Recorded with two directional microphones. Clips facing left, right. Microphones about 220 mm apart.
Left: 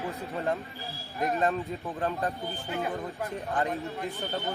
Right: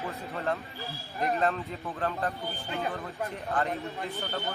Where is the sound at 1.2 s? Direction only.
Centre (ahead or behind).